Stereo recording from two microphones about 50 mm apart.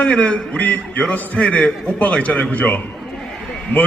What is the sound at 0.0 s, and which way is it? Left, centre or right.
A man's voice, left.